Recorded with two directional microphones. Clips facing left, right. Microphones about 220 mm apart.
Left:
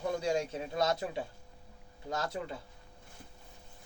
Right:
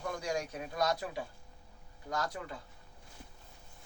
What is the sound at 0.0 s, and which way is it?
Speech, 25° left (ahead or behind).